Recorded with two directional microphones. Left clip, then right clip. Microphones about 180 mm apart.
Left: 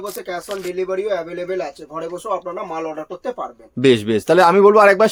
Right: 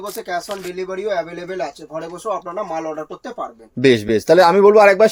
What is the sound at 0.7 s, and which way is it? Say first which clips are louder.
Speech: left 1 dB; 15° left (ahead or behind).